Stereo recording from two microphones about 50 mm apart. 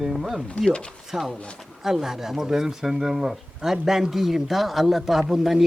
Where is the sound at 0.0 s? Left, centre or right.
Centre.